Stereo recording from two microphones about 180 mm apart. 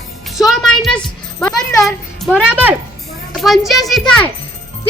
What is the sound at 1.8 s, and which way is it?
A child's voice, 5° right (ahead or behind).